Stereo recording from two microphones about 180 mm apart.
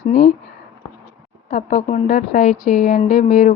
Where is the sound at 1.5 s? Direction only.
45° left (ahead or behind).